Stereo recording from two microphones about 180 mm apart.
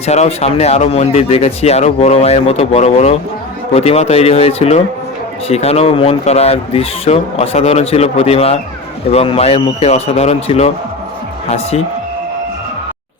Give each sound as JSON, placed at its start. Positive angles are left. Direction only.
{"t": 0.0, "sound": "speech", "side_deg": 35}